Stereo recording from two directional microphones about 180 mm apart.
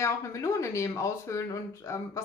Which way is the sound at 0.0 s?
15° left (ahead or behind).